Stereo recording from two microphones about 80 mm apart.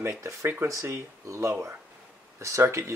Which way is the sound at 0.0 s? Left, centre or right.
Right.